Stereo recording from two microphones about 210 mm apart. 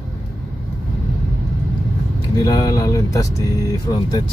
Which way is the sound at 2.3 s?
15° left (ahead or behind).